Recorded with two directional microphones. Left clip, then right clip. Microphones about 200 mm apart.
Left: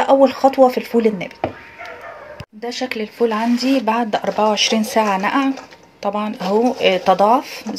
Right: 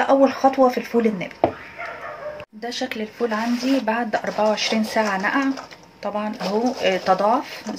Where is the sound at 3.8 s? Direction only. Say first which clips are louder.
Left 4 dB; 45° left (ahead or behind).